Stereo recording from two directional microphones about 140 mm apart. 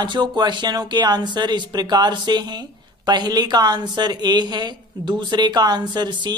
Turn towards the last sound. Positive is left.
turn(degrees=-30)  # may be behind; listen again after turning